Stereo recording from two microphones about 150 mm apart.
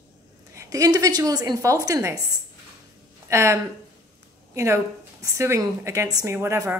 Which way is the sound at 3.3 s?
20° right (ahead or behind).